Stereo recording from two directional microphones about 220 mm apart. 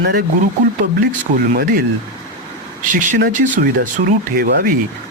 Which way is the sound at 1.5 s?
45° right (ahead or behind).